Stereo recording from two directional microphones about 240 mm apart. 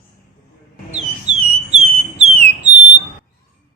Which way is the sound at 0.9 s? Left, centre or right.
Right.